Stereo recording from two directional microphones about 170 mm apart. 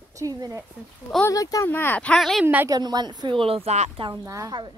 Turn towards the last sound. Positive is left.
turn(degrees=-25)  # may be behind; listen again after turning